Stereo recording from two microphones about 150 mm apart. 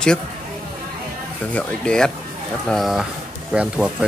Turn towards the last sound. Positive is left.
turn(degrees=-5)  # may be behind; listen again after turning